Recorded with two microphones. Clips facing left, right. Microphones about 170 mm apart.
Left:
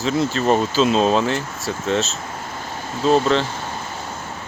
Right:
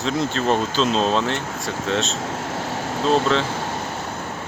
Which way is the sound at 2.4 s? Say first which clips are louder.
Right 5 dB; 75° right (ahead or behind).